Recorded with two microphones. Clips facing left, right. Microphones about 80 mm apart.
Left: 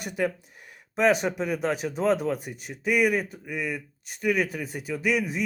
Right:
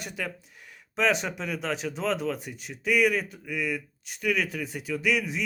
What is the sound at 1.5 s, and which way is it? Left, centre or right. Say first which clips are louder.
Speech: left 4 dB; left.